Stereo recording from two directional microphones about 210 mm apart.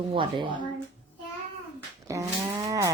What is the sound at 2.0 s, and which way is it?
Livestock, 15° right (ahead or behind).